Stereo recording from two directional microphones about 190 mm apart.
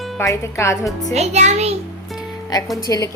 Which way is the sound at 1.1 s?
35° right (ahead or behind).